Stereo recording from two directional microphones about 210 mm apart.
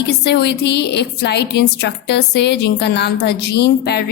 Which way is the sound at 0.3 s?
55° left (ahead or behind).